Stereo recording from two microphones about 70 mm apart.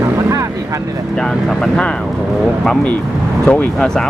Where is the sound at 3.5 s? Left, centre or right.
Left.